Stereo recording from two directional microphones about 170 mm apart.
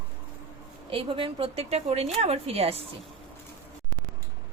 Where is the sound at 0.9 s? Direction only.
30° right (ahead or behind).